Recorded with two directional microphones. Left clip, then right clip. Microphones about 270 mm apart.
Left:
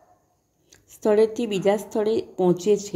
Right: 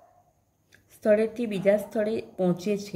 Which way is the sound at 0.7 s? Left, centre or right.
Centre.